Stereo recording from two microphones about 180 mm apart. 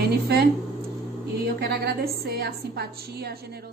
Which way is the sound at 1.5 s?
60° right (ahead or behind).